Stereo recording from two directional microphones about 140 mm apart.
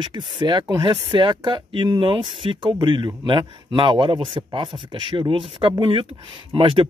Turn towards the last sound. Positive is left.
turn(degrees=-40)  # may be behind; listen again after turning